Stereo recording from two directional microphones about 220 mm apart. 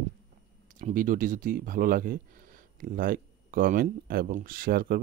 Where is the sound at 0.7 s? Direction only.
35° right (ahead or behind).